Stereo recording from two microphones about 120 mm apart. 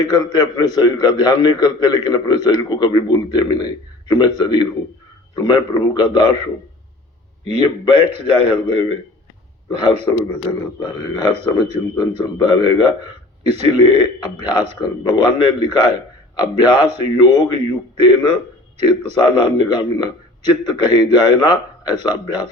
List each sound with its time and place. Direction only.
0.0 s a man's voice: 35° left (ahead or behind)
7.6 s a man's voice: 45° left (ahead or behind)